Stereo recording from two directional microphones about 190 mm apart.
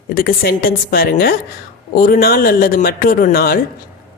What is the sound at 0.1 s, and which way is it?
A woman's voice, 50° left (ahead or behind).